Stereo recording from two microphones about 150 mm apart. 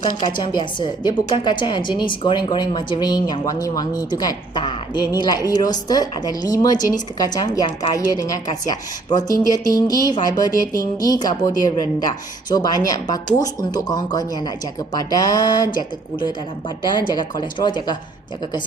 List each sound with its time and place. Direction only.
0.3 s a woman's voice: 30° left (ahead or behind)